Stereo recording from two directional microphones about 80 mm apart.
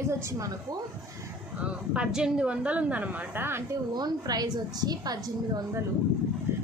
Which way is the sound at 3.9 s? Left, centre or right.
Right.